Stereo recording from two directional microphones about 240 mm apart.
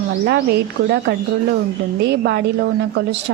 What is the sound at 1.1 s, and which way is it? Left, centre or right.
A woman's voice, right.